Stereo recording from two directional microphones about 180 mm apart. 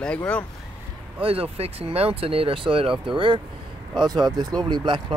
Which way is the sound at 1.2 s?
30° right (ahead or behind).